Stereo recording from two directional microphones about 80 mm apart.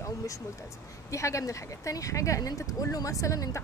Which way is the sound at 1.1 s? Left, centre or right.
Left.